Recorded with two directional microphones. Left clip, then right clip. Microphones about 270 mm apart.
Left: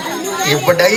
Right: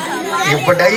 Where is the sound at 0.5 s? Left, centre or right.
Left.